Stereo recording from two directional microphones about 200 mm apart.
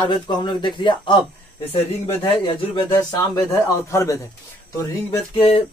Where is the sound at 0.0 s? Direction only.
20° left (ahead or behind).